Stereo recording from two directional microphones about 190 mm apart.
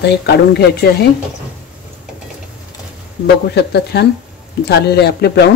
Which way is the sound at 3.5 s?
60° left (ahead or behind).